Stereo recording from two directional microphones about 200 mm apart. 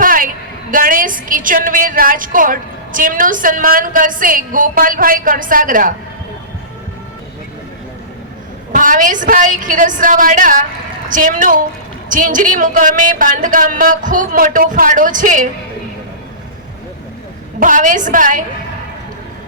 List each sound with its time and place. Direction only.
0.0 s a sound: 45° right (ahead or behind)
0.7 s a woman's voice: 45° right (ahead or behind)
8.7 s a woman's voice: 40° right (ahead or behind)
17.6 s a woman's voice: 40° right (ahead or behind)